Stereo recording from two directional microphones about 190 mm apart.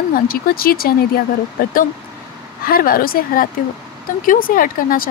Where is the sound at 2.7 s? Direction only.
50° left (ahead or behind).